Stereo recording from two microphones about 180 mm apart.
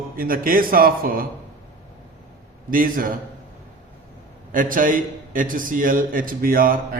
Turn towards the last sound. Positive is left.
turn(degrees=-50)  # may be behind; listen again after turning